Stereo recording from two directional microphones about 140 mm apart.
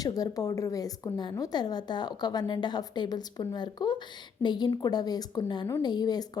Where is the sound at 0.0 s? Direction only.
25° left (ahead or behind).